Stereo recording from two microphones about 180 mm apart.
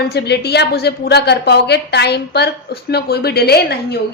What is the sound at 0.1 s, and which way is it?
A woman's voice, 65° left (ahead or behind).